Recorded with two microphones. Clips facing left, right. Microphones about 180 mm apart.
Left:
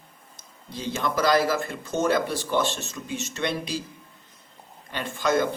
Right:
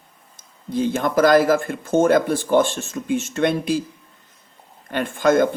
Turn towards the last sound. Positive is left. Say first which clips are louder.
# right 7 dB
turn(degrees=-50)  # may be behind; listen again after turning